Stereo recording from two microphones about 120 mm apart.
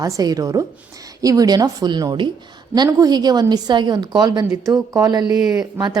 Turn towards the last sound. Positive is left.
turn(degrees=-35)  # may be behind; listen again after turning